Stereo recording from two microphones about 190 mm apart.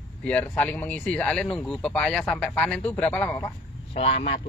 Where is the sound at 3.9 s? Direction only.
30° left (ahead or behind).